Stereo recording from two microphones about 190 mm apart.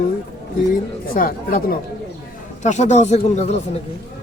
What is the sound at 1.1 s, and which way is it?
Speech, 50° left (ahead or behind).